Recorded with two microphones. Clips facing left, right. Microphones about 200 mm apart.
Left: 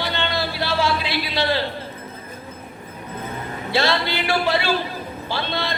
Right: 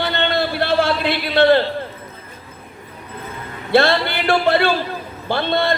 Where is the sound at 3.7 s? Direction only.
55° right (ahead or behind).